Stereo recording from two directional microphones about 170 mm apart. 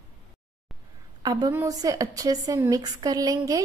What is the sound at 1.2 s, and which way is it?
Speech, 20° right (ahead or behind).